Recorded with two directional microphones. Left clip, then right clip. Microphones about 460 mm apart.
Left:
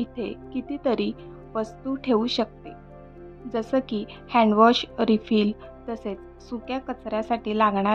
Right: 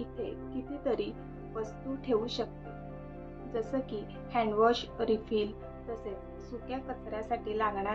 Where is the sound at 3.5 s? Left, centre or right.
Left.